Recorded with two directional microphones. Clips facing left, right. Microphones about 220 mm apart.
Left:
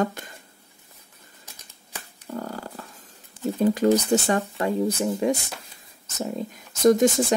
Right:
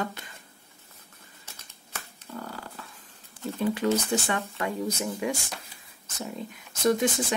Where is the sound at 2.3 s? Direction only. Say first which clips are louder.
Left 6 dB; 40° left (ahead or behind).